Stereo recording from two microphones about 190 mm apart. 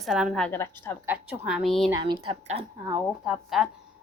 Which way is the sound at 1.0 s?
10° right (ahead or behind).